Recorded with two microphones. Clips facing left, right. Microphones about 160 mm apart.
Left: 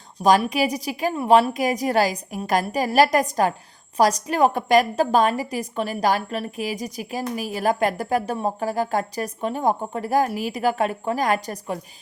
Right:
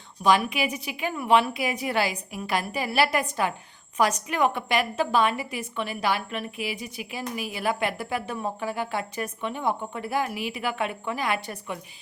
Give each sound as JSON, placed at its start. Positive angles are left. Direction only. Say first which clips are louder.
{"t": 0.2, "sound": "a woman's voice", "louder": "left 4 dB", "side_deg": 40}